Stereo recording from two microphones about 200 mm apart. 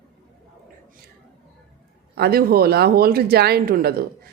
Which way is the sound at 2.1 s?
50° right (ahead or behind).